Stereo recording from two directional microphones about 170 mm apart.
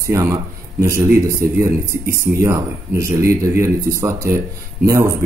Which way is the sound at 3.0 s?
15° right (ahead or behind).